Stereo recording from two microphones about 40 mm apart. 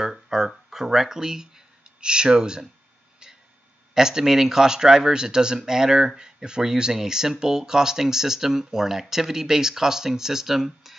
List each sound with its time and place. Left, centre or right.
0.0 s a sound: centre
0.7 s speech: centre
3.9 s speech: centre